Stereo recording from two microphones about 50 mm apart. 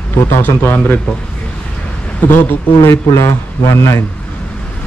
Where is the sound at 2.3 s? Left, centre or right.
Left.